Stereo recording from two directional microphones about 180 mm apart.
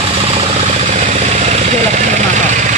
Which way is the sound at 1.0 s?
40° right (ahead or behind).